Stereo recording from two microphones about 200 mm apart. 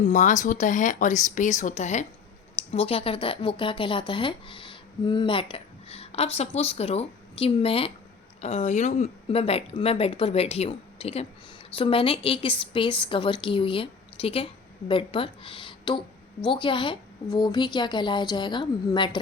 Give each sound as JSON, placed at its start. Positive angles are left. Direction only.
{"t": 0.0, "sound": "a woman's voice", "side_deg": 40}